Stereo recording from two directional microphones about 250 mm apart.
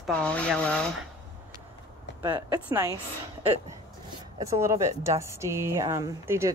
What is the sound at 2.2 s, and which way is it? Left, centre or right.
Speech, centre.